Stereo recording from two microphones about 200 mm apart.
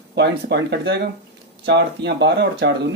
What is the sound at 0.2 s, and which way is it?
Speech, 60° right (ahead or behind).